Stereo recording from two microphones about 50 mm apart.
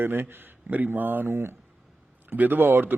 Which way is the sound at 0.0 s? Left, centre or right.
Right.